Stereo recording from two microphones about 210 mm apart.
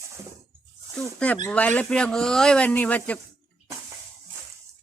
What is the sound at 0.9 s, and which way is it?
Speech, 5° left (ahead or behind).